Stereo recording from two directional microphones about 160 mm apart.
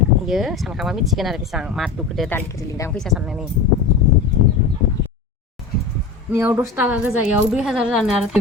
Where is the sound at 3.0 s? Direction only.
Centre (ahead or behind).